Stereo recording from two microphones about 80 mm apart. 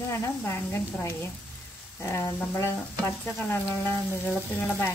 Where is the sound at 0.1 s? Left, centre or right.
Left.